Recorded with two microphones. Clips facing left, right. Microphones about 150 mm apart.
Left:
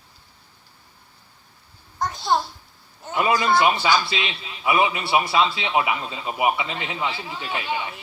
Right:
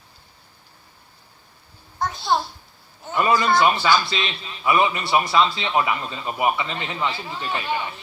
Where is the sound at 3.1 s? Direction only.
15° left (ahead or behind).